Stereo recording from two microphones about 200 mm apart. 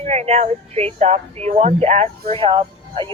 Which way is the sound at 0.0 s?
35° right (ahead or behind).